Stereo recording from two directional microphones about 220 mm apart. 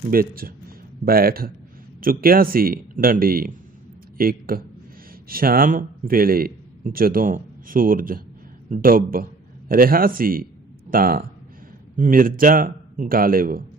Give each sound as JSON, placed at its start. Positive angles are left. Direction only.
{"t": 0.1, "sound": "a man's voice", "side_deg": -40}